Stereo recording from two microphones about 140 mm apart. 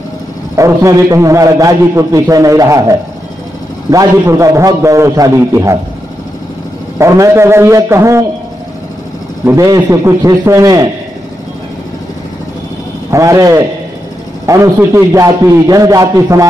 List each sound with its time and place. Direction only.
0.6 s a man's voice: 20° right (ahead or behind)
7.0 s a man's voice: 20° right (ahead or behind)
9.4 s a man's voice: 20° right (ahead or behind)
13.1 s a man's voice: 25° right (ahead or behind)